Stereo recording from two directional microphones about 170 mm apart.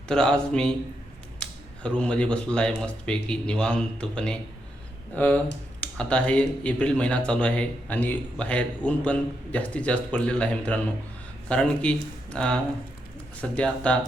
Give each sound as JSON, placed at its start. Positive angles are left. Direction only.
{"t": 0.1, "sound": "speech", "side_deg": 5}